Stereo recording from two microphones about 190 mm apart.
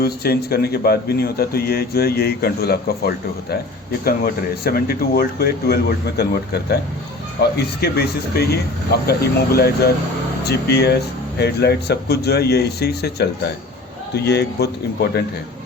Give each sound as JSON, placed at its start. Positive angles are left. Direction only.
{"t": 0.0, "sound": "speech", "side_deg": 55}